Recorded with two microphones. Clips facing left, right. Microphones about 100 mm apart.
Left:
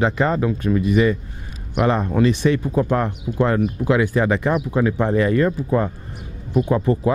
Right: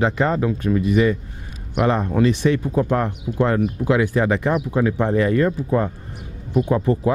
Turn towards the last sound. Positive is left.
turn(degrees=20)  # may be behind; listen again after turning